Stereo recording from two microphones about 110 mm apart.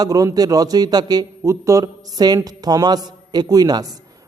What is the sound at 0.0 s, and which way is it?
A man's voice, 35° right (ahead or behind).